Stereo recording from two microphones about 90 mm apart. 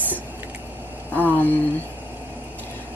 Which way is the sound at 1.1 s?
20° left (ahead or behind).